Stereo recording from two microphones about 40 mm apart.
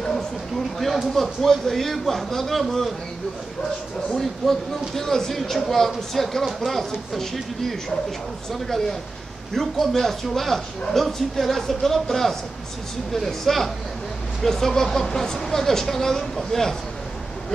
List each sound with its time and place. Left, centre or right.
1.1 s a man's voice: centre
4.1 s speech: centre
8.5 s a man's voice: centre